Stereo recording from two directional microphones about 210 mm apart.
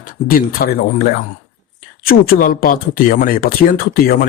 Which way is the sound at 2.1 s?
40° left (ahead or behind).